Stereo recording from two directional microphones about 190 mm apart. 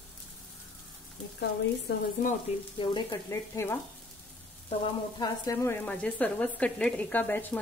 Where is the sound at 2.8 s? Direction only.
20° left (ahead or behind).